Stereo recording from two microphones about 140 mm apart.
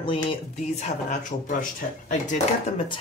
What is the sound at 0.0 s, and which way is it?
Speech, 40° left (ahead or behind).